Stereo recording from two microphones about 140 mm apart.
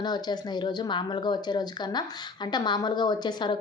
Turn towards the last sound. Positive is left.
turn(degrees=30)  # may be behind; listen again after turning